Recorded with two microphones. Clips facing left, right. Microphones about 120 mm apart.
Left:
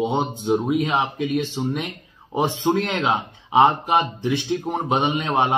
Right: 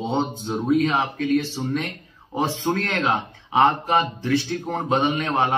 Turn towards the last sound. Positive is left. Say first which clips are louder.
# left 1 dB
turn(degrees=20)  # may be behind; listen again after turning